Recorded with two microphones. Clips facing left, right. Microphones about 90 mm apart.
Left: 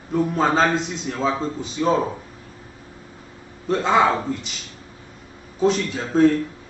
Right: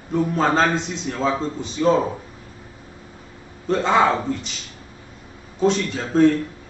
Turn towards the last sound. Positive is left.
turn(degrees=0)  # may be behind; listen again after turning